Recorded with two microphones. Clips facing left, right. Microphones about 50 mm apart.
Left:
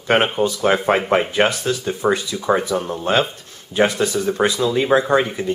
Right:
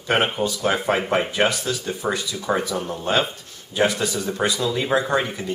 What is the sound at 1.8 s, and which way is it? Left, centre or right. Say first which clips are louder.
Speech: left 9 dB; left.